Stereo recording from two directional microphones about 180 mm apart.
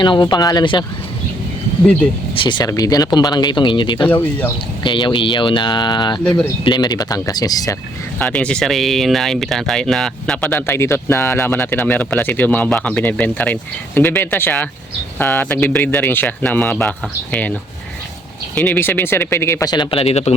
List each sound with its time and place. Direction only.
0.0 s speech: 25° left (ahead or behind)
2.3 s speech: 25° left (ahead or behind)
4.1 s speech: 10° left (ahead or behind)
4.8 s speech: 25° left (ahead or behind)
6.2 s speech: 5° left (ahead or behind)
6.7 s speech: 25° left (ahead or behind)
8.2 s speech: 5° left (ahead or behind)
18.5 s speech: 10° left (ahead or behind); by 20.3 s 35° left (ahead or behind)